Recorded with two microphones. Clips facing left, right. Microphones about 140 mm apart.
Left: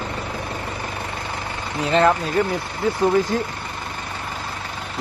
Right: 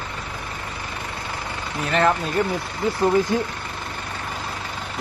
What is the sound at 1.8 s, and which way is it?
Speech, 20° left (ahead or behind).